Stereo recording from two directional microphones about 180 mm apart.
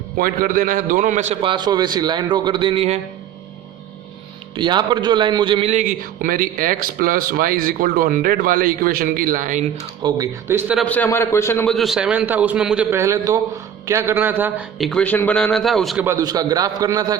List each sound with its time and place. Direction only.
0.2 s a man's voice: 50° right (ahead or behind); by 3.0 s 35° right (ahead or behind)
4.5 s a man's voice: 25° right (ahead or behind); by 9.6 s 45° right (ahead or behind)
10.0 s a man's voice: 15° right (ahead or behind)
10.8 s a man's voice: 10° left (ahead or behind)
11.7 s a man's voice: centre (ahead or behind)
14.8 s a man's voice: 5° left (ahead or behind)
16.0 s a man's voice: 15° right (ahead or behind)